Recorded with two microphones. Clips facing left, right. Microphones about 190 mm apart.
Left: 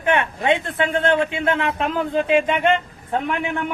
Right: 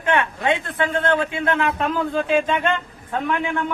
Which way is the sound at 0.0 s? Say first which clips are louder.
Left 1 dB; 20° left (ahead or behind).